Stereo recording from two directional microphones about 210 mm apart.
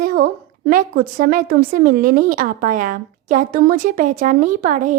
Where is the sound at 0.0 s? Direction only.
40° right (ahead or behind).